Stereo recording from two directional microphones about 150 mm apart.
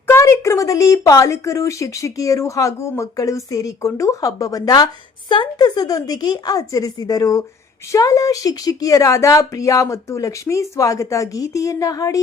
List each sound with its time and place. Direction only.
0.1 s speech: 20° left (ahead or behind)